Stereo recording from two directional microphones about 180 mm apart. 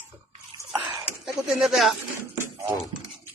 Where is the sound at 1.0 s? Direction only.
5° right (ahead or behind).